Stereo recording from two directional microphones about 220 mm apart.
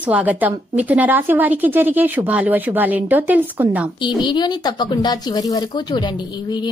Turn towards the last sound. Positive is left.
turn(degrees=20)  # may be behind; listen again after turning